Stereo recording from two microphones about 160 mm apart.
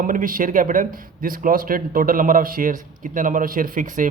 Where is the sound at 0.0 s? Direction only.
55° right (ahead or behind).